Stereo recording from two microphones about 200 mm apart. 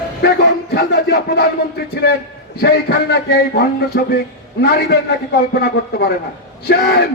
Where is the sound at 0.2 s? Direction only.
55° left (ahead or behind).